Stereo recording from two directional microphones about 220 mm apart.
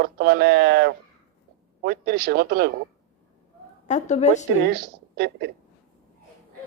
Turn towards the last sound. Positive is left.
turn(degrees=-50)  # may be behind; listen again after turning